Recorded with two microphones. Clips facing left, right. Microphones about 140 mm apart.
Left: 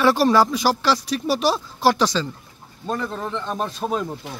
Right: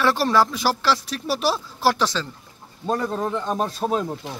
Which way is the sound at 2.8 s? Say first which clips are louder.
Right 3 dB; 15° right (ahead or behind).